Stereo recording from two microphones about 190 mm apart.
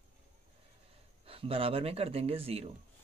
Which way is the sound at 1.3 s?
30° right (ahead or behind).